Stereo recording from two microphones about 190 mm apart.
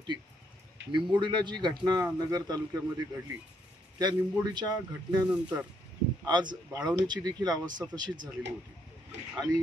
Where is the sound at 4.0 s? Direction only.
20° right (ahead or behind).